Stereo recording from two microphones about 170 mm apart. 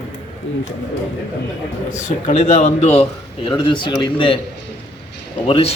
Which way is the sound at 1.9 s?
45° left (ahead or behind).